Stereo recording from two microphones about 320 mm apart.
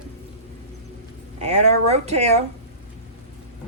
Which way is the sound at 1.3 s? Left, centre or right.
Right.